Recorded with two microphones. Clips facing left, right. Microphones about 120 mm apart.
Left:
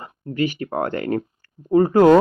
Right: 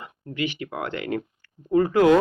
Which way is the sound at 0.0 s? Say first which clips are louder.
Left 6 dB; 45° left (ahead or behind).